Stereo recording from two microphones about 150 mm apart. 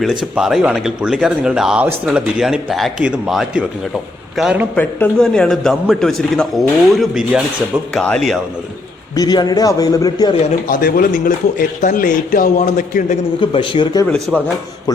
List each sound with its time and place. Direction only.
0.0 s speech: centre (ahead or behind)
4.7 s speech: 10° left (ahead or behind)
9.1 s a man's voice: 25° left (ahead or behind)
10.7 s speech: 75° left (ahead or behind); by 13.1 s 60° left (ahead or behind)
13.4 s speech: 35° left (ahead or behind)
14.3 s speech: centre (ahead or behind)